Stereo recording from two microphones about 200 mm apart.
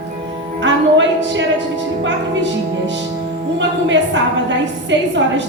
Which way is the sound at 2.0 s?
60° right (ahead or behind).